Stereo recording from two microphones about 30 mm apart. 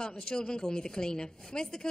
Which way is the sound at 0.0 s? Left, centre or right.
Left.